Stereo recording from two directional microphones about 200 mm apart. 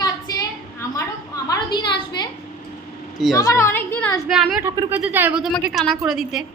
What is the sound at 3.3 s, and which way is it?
A woman's voice, 15° left (ahead or behind).